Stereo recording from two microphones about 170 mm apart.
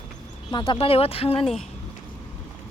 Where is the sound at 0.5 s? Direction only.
30° left (ahead or behind).